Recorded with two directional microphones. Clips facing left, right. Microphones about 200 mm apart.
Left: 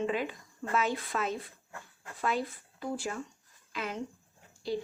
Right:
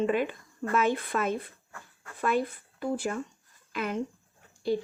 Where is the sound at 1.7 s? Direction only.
25° left (ahead or behind).